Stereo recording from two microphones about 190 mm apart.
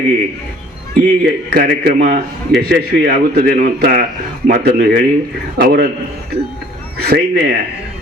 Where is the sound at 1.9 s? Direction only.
45° right (ahead or behind).